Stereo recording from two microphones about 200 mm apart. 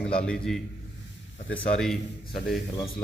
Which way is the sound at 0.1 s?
5° left (ahead or behind).